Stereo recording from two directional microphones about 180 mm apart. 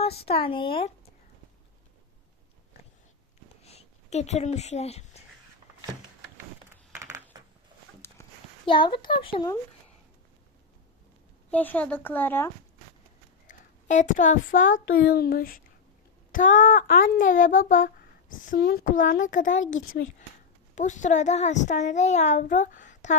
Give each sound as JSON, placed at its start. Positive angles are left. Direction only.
{"t": 0.2, "sound": "speech", "side_deg": 30}
{"t": 3.6, "sound": "speech", "side_deg": 35}
{"t": 7.0, "sound": "a sound", "side_deg": -15}
{"t": 8.2, "sound": "a sound", "side_deg": 15}
{"t": 8.6, "sound": "speech", "side_deg": 30}
{"t": 11.5, "sound": "speech", "side_deg": 10}
{"t": 13.5, "sound": "a child's voice", "side_deg": 45}
{"t": 20.7, "sound": "a child's voice", "side_deg": 45}